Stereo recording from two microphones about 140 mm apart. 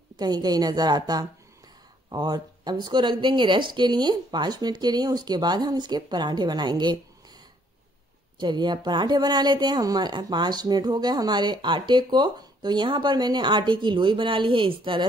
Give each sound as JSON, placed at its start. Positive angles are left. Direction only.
{"t": 0.1, "sound": "a woman's voice", "side_deg": -30}
{"t": 8.4, "sound": "speech", "side_deg": -30}